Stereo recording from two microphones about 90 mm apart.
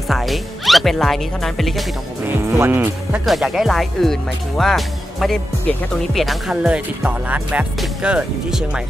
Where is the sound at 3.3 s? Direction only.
Centre (ahead or behind).